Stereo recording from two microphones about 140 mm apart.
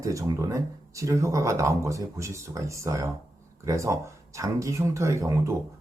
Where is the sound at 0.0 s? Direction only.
25° right (ahead or behind).